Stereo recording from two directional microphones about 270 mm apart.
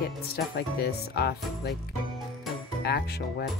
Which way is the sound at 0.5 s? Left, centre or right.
Left.